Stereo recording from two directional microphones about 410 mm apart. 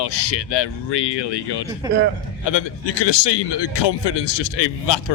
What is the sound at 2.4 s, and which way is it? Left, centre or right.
A man's voice, left.